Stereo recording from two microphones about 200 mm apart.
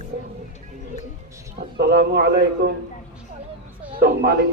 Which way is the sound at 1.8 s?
55° right (ahead or behind).